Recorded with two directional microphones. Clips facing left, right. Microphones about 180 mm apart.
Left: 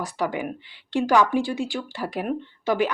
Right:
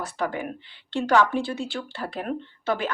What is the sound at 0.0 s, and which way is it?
A woman's voice, 15° left (ahead or behind).